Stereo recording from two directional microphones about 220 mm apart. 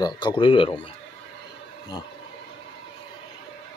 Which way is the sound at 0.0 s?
20° left (ahead or behind).